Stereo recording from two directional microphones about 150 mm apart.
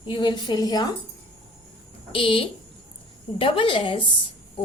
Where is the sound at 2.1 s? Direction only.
35° left (ahead or behind).